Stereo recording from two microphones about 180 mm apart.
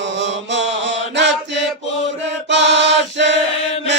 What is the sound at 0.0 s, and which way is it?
Chant, 90° right.